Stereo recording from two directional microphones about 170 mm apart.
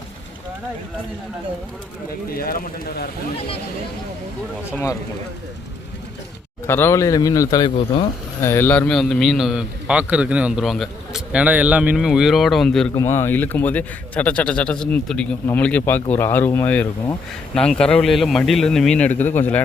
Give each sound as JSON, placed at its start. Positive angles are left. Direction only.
{"t": 2.3, "sound": "speech", "side_deg": 60}
{"t": 6.7, "sound": "a man's voice", "side_deg": 15}
{"t": 13.0, "sound": "a man's voice", "side_deg": 15}